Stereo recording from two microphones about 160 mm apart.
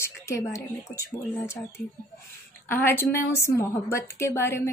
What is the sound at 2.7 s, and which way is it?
A woman's voice, 15° left (ahead or behind).